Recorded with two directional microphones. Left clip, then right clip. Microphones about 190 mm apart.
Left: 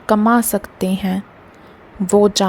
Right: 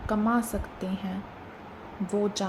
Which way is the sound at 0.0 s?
55° left (ahead or behind).